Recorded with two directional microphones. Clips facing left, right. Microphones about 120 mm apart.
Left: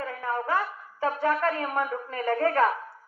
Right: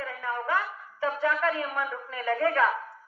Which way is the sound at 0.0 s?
40° left (ahead or behind).